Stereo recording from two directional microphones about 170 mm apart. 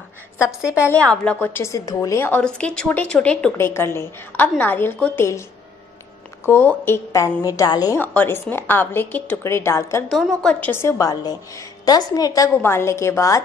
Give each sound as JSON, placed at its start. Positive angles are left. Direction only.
{"t": 0.5, "sound": "a woman's voice", "side_deg": -5}
{"t": 0.8, "sound": "a woman's voice", "side_deg": 5}
{"t": 6.4, "sound": "a woman's voice", "side_deg": 15}
{"t": 10.0, "sound": "a woman's voice", "side_deg": 0}